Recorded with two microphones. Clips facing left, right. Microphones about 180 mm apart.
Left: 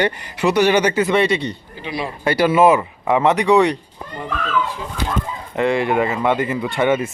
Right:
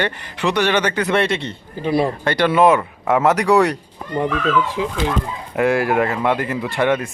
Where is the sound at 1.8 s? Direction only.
50° right (ahead or behind).